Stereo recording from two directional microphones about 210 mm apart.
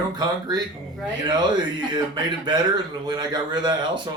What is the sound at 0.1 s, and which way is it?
Speech, 20° right (ahead or behind).